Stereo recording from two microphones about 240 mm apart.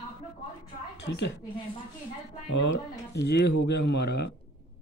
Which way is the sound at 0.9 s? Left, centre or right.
Left.